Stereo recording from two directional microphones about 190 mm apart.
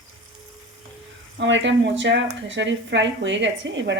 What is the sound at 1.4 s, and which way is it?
A woman's voice, 75° right (ahead or behind).